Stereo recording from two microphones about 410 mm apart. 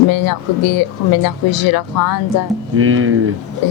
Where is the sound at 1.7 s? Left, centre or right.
Left.